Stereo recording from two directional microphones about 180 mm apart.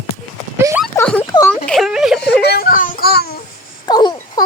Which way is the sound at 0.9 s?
10° left (ahead or behind).